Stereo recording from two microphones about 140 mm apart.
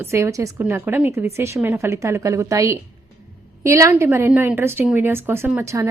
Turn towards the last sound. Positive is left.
turn(degrees=-20)  # may be behind; listen again after turning